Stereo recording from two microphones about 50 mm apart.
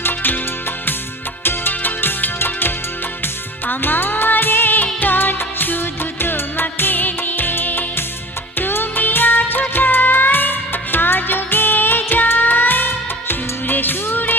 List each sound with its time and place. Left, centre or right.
0.0 s music: left
1.5 s music: left